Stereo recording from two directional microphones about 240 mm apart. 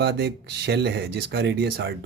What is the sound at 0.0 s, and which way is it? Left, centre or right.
A man's voice, right.